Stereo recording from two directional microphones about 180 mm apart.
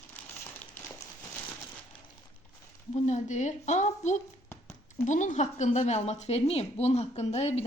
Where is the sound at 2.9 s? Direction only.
40° left (ahead or behind).